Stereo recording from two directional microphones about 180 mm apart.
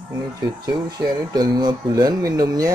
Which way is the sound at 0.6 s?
20° right (ahead or behind).